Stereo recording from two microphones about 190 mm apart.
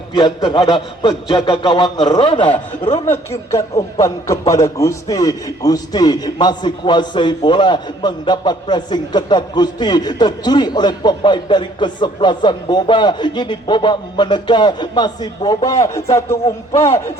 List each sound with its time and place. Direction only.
0.4 s a man's voice: 25° left (ahead or behind)
4.0 s a man's voice: 15° left (ahead or behind)